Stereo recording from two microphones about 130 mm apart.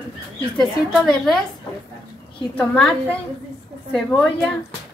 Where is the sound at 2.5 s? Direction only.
10° left (ahead or behind).